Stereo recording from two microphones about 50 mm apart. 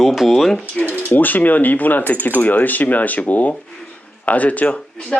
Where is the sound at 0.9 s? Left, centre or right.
Left.